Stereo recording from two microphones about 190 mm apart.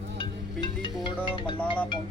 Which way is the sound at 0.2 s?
25° left (ahead or behind).